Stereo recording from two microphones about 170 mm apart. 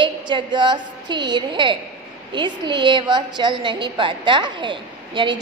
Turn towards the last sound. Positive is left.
turn(degrees=-30)  # may be behind; listen again after turning